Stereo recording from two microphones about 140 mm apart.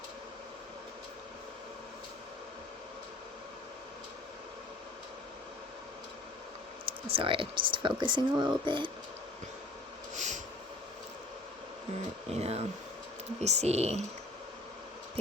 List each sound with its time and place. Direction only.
6.8 s speech: 40° right (ahead or behind)
10.2 s snort: 60° right (ahead or behind)
12.3 s speech: 50° right (ahead or behind)